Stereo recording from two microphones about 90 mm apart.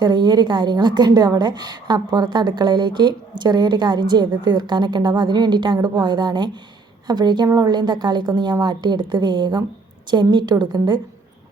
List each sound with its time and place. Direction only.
0.0 s a woman's voice: 55° right (ahead or behind)